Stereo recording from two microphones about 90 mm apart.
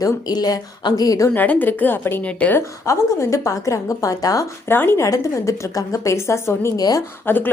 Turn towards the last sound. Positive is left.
turn(degrees=20)  # may be behind; listen again after turning